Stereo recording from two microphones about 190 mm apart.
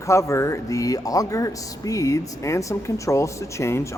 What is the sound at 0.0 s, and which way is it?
Speech, 15° left (ahead or behind).